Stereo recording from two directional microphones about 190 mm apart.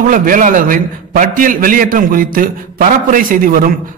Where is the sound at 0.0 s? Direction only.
45° right (ahead or behind).